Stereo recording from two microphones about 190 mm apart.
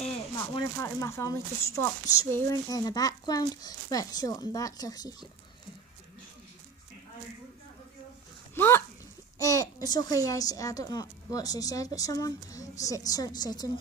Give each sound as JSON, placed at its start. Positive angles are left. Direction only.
{"t": 0.7, "sound": "speech", "side_deg": 15}
{"t": 8.5, "sound": "speech", "side_deg": 10}